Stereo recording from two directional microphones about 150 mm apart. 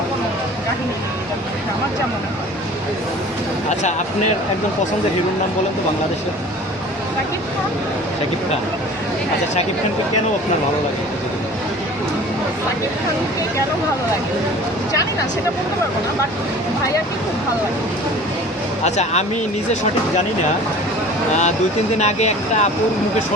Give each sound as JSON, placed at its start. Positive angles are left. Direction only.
{"t": 18.9, "sound": "speech", "side_deg": 50}
{"t": 21.9, "sound": "speech", "side_deg": 50}